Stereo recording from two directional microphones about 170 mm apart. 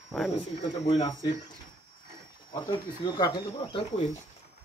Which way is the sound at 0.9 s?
25° left (ahead or behind).